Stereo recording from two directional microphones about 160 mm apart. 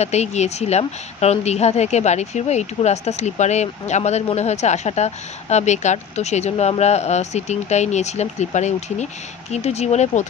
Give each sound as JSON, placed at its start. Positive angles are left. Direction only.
{"t": 0.0, "sound": "a woman's voice", "side_deg": 45}